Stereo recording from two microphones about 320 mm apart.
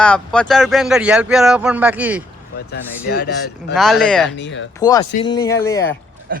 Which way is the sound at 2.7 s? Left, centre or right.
Left.